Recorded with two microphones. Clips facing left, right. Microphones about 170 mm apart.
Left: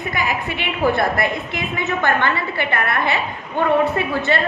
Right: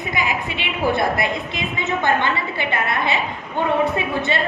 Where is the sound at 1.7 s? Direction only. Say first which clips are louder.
Even; 20° right (ahead or behind).